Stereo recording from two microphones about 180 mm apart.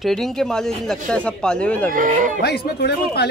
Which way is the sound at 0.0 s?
Centre (ahead or behind).